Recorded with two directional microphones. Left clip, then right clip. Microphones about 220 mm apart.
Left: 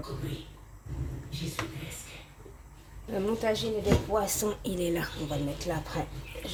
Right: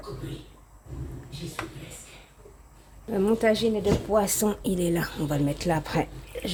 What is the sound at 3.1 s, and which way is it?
Speech, 35° right (ahead or behind).